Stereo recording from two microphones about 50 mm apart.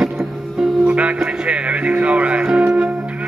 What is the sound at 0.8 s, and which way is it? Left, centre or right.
Music, right.